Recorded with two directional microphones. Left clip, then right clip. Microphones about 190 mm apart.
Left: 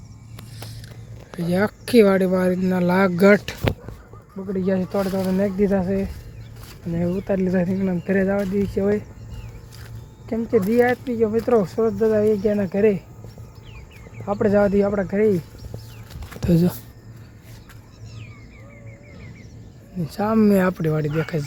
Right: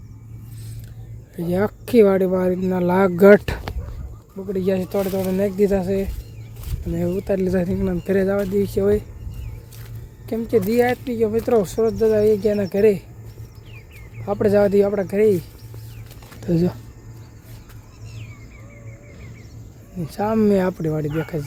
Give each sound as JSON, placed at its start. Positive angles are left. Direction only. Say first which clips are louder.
{"t": 1.4, "sound": "speech", "louder": "even", "side_deg": -10}
{"t": 4.4, "sound": "speech", "louder": "right 2 dB", "side_deg": -10}
{"t": 10.2, "sound": "speech", "louder": "right 1 dB", "side_deg": -10}
{"t": 14.3, "sound": "speech", "louder": "right 2 dB", "side_deg": -15}
{"t": 20.1, "sound": "speech", "louder": "right 1 dB", "side_deg": 0}